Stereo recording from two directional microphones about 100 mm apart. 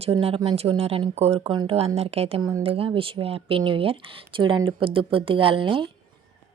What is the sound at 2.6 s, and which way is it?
Speech, 70° right (ahead or behind).